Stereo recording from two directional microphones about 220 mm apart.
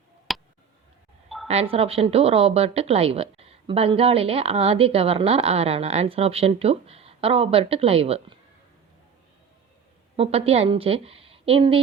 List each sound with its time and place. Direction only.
0.3 s a sound: centre (ahead or behind)
1.5 s a woman's voice: 25° right (ahead or behind)
10.2 s a woman's voice: 25° right (ahead or behind)